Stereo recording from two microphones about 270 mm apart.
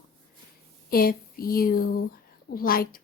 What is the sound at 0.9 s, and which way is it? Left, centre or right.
Speech, left.